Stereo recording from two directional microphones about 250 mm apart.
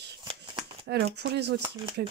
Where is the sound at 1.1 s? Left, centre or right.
Right.